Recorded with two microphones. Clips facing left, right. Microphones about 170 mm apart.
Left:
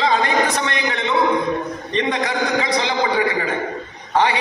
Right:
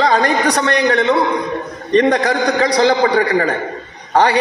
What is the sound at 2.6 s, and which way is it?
Speech, 40° right (ahead or behind).